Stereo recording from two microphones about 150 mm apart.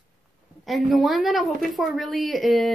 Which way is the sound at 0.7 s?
Centre (ahead or behind).